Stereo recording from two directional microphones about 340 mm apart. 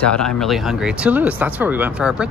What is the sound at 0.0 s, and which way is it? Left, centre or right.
Speech, centre.